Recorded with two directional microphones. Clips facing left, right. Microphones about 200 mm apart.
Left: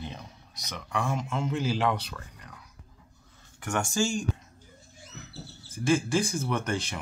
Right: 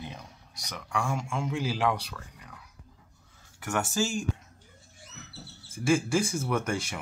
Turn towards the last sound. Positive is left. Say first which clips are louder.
# right 1 dB
turn(degrees=-10)  # may be behind; listen again after turning